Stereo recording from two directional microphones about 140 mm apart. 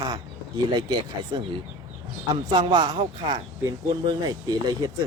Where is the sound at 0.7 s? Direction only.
30° right (ahead or behind).